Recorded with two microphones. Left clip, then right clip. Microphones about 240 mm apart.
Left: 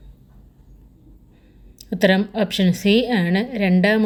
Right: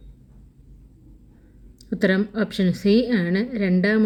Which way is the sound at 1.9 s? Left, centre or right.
Left.